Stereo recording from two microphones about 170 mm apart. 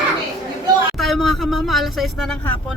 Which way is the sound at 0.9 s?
Centre (ahead or behind).